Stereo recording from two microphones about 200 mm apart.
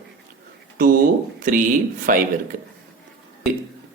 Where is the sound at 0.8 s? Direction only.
45° right (ahead or behind).